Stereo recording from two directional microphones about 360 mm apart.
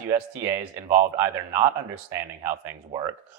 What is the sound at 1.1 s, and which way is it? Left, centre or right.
Speech, centre.